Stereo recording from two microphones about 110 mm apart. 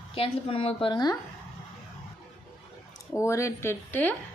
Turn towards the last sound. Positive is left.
turn(degrees=20)  # may be behind; listen again after turning